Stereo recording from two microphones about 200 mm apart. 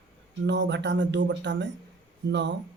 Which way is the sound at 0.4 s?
60° right (ahead or behind).